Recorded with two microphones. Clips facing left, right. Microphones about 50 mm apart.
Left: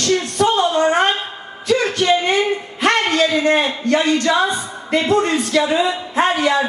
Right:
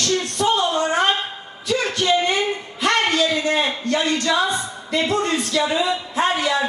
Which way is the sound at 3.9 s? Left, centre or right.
Left.